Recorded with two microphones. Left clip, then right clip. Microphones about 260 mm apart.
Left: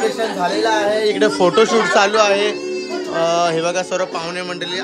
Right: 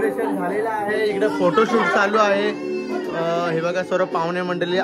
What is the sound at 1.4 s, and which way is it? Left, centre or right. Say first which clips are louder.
A man's voice: left 3 dB; centre.